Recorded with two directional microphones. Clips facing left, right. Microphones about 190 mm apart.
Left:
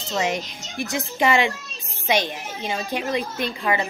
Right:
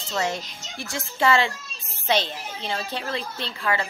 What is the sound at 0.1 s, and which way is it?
A child's voice, 15° left (ahead or behind).